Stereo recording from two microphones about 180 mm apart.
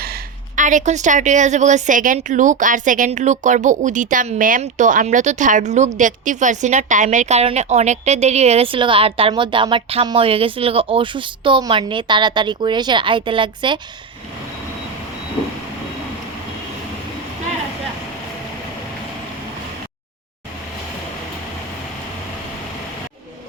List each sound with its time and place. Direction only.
0.0 s a woman's voice: 50° right (ahead or behind); by 13.7 s 25° right (ahead or behind)